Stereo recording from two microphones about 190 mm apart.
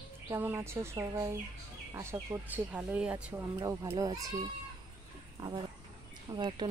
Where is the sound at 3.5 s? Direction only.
15° right (ahead or behind).